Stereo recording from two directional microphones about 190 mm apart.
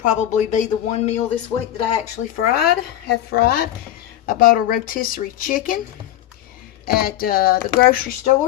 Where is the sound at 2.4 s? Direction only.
50° left (ahead or behind).